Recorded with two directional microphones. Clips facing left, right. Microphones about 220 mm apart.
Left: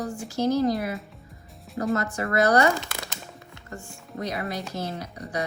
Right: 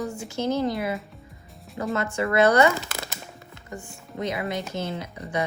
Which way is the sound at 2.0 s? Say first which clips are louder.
Right 7 dB; 25° right (ahead or behind).